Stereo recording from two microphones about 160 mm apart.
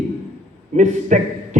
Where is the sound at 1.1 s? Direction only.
50° right (ahead or behind).